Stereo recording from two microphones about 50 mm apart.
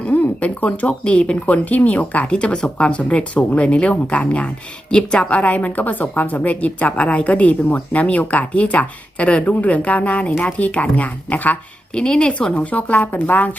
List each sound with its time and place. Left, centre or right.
0.0 s speech: left
11.9 s speech: centre; by 13.6 s left